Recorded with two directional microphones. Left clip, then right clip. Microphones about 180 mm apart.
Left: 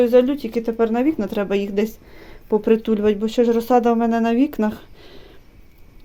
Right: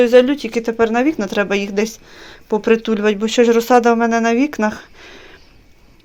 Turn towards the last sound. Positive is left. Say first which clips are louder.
# right 6 dB
turn(degrees=15)  # may be behind; listen again after turning